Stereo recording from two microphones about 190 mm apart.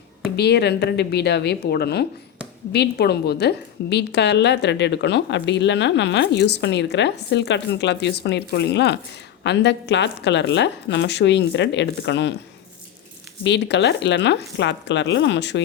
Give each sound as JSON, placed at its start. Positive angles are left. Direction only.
{"t": 0.3, "sound": "a woman's voice", "side_deg": 60}
{"t": 13.4, "sound": "a woman's voice", "side_deg": 65}